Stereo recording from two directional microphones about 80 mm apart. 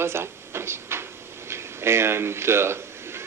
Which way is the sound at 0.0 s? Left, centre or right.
Right.